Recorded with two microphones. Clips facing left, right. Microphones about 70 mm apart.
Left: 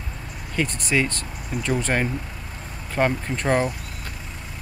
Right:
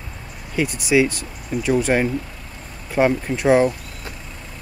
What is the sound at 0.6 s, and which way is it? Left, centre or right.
Speech, centre.